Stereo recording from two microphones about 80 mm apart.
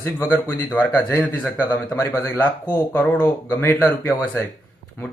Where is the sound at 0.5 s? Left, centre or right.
Left.